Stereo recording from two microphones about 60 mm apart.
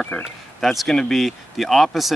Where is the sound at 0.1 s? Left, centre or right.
Centre.